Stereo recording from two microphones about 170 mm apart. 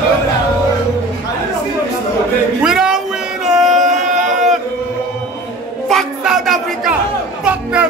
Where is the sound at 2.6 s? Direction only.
5° right (ahead or behind).